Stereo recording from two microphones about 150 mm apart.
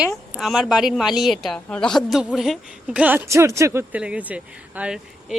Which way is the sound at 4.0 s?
5° right (ahead or behind).